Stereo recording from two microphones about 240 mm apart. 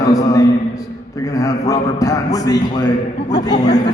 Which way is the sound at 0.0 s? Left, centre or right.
Centre.